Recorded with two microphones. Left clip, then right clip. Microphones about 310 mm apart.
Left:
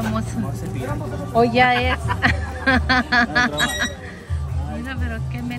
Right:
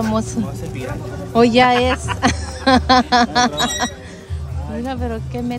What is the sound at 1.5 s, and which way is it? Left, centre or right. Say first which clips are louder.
A woman's voice: right 5 dB; right.